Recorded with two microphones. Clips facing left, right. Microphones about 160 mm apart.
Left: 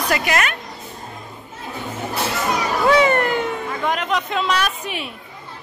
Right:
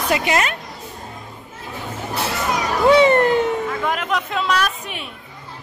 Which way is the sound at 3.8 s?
5° right (ahead or behind).